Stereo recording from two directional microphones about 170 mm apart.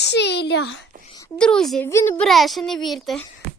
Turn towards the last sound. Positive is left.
turn(degrees=0)  # may be behind; listen again after turning